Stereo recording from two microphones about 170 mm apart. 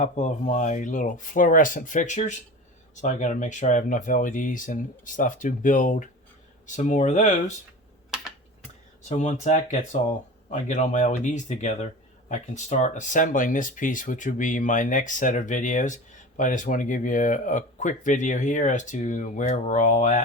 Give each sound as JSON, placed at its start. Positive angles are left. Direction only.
{"t": 0.0, "sound": "speech", "side_deg": 45}
{"t": 9.0, "sound": "speech", "side_deg": 45}